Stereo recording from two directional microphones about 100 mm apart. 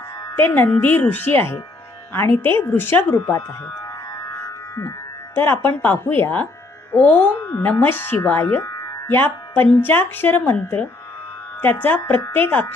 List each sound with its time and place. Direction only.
0.3 s speech: 20° left (ahead or behind)
4.7 s speech: 30° left (ahead or behind)